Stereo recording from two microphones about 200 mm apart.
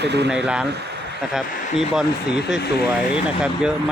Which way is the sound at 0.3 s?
5° right (ahead or behind).